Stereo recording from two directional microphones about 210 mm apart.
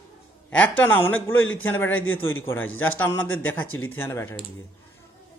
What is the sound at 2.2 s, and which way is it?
Speech, 70° left (ahead or behind).